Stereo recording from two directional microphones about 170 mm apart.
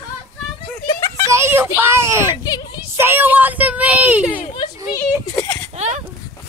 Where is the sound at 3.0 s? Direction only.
10° right (ahead or behind).